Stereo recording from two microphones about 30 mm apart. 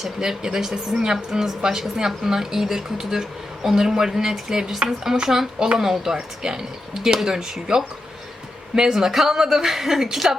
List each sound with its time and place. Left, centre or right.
0.2 s a woman's voice: centre
8.7 s a woman's voice: centre